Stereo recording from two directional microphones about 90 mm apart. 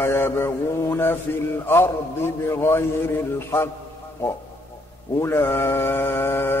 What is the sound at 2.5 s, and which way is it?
Mantra, 30° left (ahead or behind).